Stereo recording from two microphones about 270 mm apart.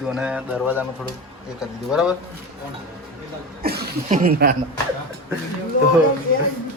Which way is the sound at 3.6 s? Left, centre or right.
Right.